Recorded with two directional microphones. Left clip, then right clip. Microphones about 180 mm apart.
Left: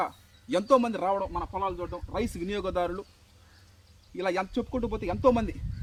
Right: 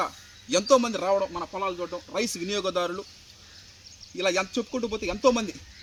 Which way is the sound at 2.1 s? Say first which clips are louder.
Right 3 dB; 10° left (ahead or behind).